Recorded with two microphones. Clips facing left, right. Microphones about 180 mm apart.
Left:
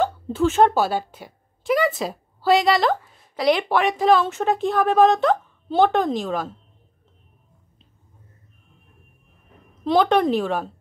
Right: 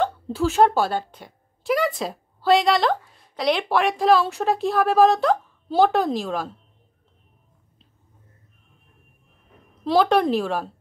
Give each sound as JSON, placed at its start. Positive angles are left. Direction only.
{"t": 0.0, "sound": "a woman's voice", "side_deg": 0}
{"t": 9.8, "sound": "speech", "side_deg": 0}